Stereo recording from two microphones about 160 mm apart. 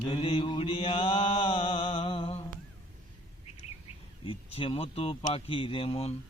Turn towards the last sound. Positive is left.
turn(degrees=35)  # may be behind; listen again after turning